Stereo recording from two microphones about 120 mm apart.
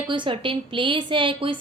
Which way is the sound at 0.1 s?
45° right (ahead or behind).